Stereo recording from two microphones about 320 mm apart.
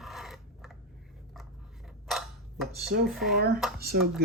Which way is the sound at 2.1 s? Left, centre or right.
Centre.